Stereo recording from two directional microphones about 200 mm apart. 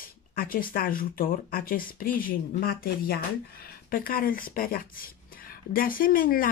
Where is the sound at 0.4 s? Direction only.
45° left (ahead or behind).